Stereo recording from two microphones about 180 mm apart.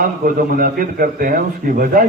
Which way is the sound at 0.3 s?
55° right (ahead or behind).